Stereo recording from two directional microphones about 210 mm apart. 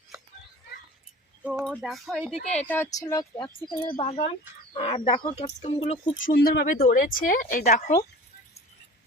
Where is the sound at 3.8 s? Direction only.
25° left (ahead or behind).